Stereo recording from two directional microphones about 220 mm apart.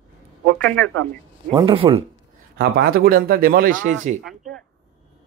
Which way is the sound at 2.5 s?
45° right (ahead or behind).